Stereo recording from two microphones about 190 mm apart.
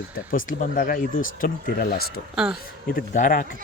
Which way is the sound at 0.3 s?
50° left (ahead or behind).